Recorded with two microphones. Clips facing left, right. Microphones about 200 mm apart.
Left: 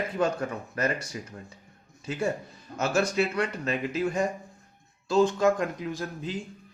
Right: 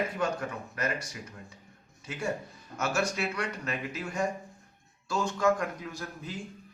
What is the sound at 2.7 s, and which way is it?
A man's voice, 30° left (ahead or behind).